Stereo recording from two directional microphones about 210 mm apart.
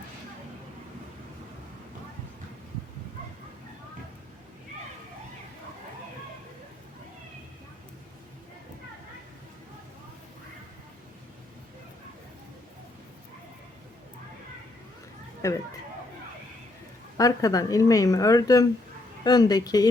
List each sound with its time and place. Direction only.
15.4 s a woman's voice: 15° left (ahead or behind)
17.2 s a woman's voice: 15° left (ahead or behind)